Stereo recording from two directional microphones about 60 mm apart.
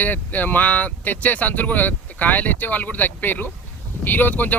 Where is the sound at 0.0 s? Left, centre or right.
Left.